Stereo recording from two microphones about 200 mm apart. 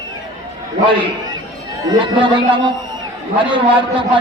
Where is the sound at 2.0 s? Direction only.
25° right (ahead or behind).